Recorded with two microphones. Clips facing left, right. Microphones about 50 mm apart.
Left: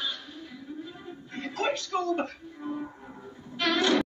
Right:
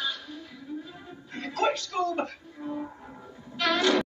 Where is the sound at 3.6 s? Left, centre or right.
Left.